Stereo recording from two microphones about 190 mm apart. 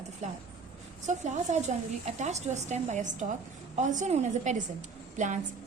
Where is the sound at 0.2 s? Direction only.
35° right (ahead or behind).